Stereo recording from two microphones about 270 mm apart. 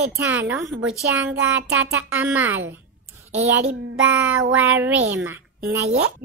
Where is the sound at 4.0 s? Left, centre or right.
Centre.